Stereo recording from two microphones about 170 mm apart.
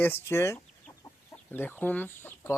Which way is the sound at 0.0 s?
15° left (ahead or behind).